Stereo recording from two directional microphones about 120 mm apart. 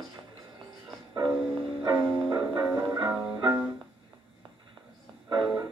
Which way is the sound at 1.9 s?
15° right (ahead or behind).